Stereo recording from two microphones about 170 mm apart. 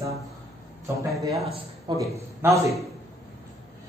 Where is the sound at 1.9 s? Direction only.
25° right (ahead or behind).